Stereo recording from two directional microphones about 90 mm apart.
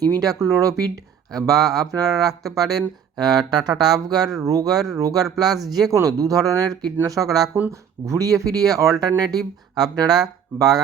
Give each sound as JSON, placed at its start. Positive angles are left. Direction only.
{"t": 0.0, "sound": "speech", "side_deg": -45}
{"t": 1.3, "sound": "speech", "side_deg": -45}